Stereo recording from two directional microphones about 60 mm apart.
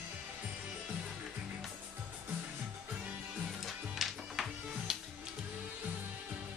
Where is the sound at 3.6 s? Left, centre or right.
Centre.